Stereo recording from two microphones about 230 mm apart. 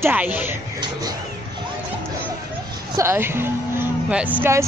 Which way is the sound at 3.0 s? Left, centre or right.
Centre.